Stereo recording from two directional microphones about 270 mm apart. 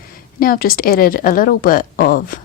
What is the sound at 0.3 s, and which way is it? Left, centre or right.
A woman's voice, left.